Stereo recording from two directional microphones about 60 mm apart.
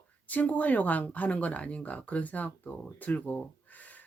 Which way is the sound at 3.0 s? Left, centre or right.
Left.